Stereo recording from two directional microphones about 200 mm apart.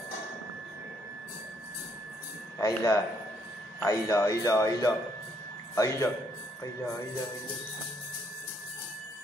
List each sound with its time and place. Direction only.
2.6 s speech: 15° left (ahead or behind)